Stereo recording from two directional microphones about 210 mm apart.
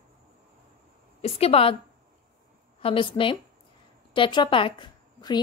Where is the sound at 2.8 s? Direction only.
25° left (ahead or behind).